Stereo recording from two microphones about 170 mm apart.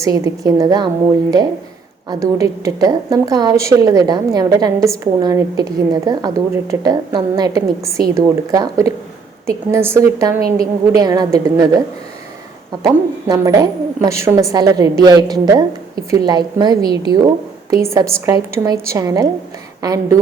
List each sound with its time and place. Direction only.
0.0 s a woman's voice: 20° right (ahead or behind)
2.0 s a woman's voice: 20° right (ahead or behind)
12.8 s a woman's voice: 20° right (ahead or behind)